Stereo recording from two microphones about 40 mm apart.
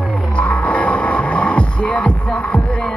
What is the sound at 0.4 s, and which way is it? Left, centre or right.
Music, left.